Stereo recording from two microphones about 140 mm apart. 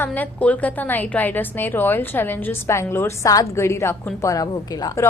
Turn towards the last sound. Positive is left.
turn(degrees=25)  # may be behind; listen again after turning